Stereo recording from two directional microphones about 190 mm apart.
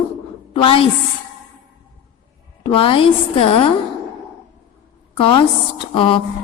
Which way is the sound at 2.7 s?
30° left (ahead or behind).